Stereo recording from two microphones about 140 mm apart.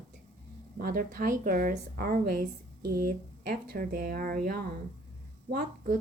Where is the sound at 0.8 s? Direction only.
90° right.